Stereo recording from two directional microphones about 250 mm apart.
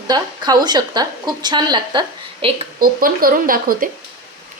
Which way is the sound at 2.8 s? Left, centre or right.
Right.